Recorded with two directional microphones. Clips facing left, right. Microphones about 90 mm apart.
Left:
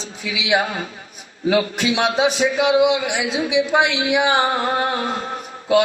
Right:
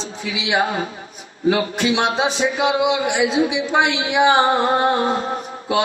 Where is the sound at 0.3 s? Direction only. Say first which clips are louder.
Even; 30° right (ahead or behind).